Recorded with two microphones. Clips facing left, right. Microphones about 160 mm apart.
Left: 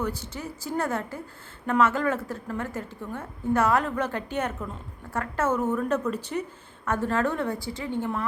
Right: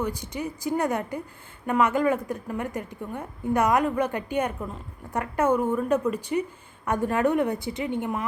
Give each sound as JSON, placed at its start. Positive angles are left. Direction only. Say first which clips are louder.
{"t": 0.0, "sound": "a woman's voice", "louder": "right 2 dB", "side_deg": -15}